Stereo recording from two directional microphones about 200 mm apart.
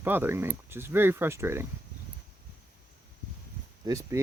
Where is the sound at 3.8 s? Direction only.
15° right (ahead or behind).